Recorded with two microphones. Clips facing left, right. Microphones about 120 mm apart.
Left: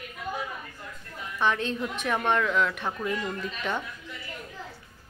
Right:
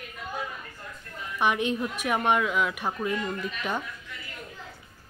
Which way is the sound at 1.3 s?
15° right (ahead or behind).